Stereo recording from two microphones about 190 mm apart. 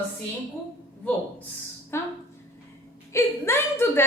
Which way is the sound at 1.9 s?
15° left (ahead or behind).